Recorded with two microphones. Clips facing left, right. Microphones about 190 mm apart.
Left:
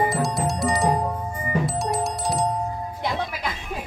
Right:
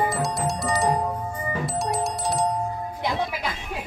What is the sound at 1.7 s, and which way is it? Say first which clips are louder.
Music: left 1 dB; centre (ahead or behind).